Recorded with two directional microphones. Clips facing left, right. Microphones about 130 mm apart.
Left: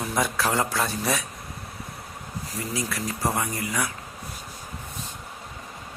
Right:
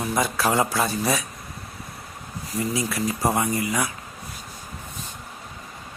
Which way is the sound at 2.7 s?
15° right (ahead or behind).